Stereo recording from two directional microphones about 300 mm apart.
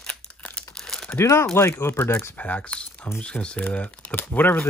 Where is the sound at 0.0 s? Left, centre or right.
Centre.